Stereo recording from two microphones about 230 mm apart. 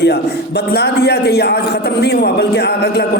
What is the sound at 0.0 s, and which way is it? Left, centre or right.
A man's voice, left.